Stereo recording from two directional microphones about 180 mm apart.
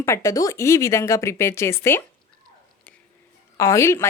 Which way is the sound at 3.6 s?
15° left (ahead or behind).